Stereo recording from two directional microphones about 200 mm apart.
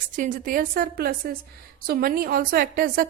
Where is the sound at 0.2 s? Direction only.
40° right (ahead or behind).